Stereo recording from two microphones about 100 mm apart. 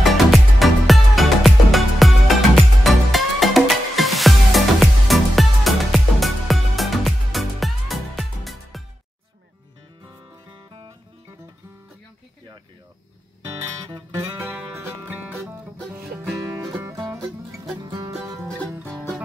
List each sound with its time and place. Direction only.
0.0 s music: centre (ahead or behind)
14.1 s music: 25° right (ahead or behind)
16.3 s music: 30° right (ahead or behind)